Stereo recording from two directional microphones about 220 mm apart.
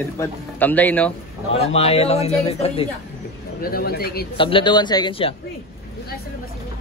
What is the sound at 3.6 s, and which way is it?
Speech, 45° left (ahead or behind).